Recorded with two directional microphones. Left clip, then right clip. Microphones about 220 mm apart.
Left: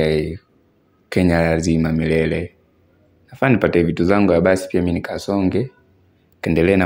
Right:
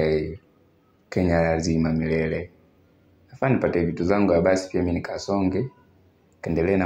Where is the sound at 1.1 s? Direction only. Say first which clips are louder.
Left 5 dB; 90° left.